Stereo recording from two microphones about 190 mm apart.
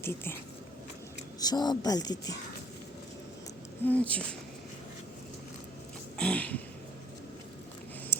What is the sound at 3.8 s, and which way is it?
Speech, 10° left (ahead or behind).